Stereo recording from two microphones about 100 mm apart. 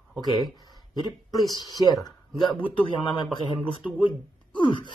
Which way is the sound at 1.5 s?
40° left (ahead or behind).